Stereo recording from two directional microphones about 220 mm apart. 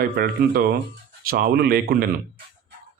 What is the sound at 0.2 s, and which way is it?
Speech, 45° right (ahead or behind).